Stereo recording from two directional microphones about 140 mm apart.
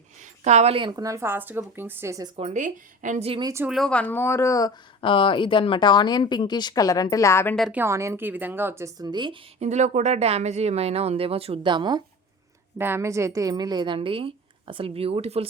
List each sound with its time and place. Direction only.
0.4 s speech: 50° right (ahead or behind); by 2.3 s 20° right (ahead or behind)
2.5 s a woman's voice: 65° right (ahead or behind)
3.4 s speech: 20° right (ahead or behind)
3.7 s speech: 5° left (ahead or behind); by 4.7 s 25° left (ahead or behind)
4.9 s speech: 35° left (ahead or behind); by 7.5 s 20° left (ahead or behind)
7.7 s speech: 15° right (ahead or behind); by 9.4 s 35° right (ahead or behind)
9.6 s speech: 60° right (ahead or behind); by 12.0 s 35° right (ahead or behind)
12.8 s a woman's voice: 20° right (ahead or behind); by 15.4 s 45° right (ahead or behind)